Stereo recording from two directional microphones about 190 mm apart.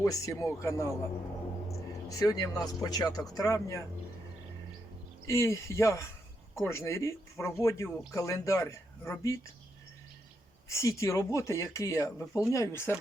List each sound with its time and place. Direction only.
0.0 s speech: 15° left (ahead or behind)
5.2 s speech: 15° left (ahead or behind)
10.7 s speech: 15° left (ahead or behind)